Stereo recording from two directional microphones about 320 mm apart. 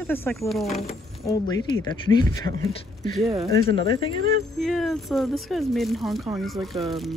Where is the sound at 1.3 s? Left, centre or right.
Centre.